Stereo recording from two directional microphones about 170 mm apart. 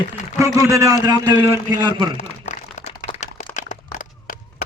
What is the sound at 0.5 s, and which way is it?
A man's voice, 20° right (ahead or behind).